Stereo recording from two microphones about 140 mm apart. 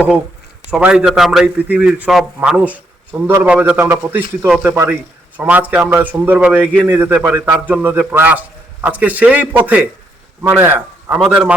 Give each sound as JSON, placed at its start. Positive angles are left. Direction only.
{"t": 0.7, "sound": "a man's voice", "side_deg": -10}